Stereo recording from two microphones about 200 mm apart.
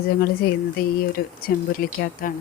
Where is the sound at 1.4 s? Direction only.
50° left (ahead or behind).